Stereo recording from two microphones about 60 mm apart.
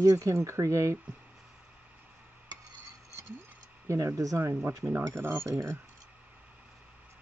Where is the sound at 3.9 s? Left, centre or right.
Right.